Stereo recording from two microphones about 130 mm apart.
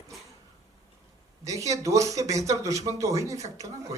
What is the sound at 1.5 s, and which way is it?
Speech, 25° right (ahead or behind).